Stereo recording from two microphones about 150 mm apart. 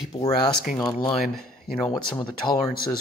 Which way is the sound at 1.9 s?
30° left (ahead or behind).